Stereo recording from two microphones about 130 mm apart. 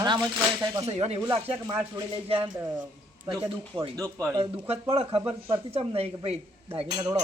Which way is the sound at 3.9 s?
20° right (ahead or behind).